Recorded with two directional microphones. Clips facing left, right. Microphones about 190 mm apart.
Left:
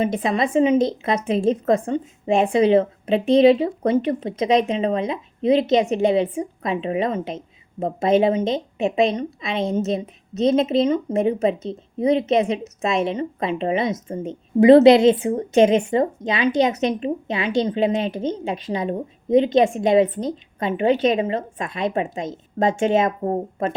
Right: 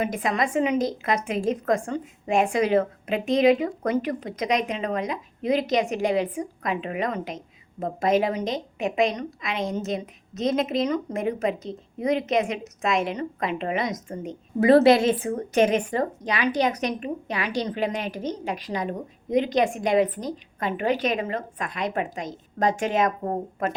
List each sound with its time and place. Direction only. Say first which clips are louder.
0.0 s a woman's voice: left 4 dB; 25° left (ahead or behind)